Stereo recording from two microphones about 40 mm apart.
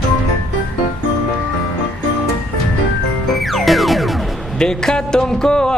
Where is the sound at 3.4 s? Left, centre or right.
Centre.